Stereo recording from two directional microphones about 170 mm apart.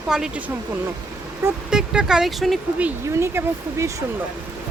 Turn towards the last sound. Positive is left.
turn(degrees=-15)  # may be behind; listen again after turning